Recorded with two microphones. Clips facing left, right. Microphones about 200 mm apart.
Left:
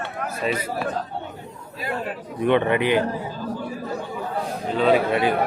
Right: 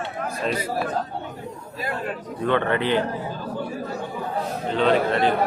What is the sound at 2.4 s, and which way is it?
Speech, 15° left (ahead or behind).